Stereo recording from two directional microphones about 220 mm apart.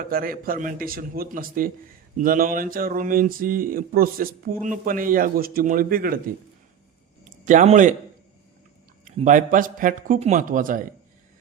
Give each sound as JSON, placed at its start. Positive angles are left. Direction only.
{"t": 0.0, "sound": "speech", "side_deg": -40}
{"t": 7.3, "sound": "speech", "side_deg": -35}
{"t": 9.0, "sound": "speech", "side_deg": -35}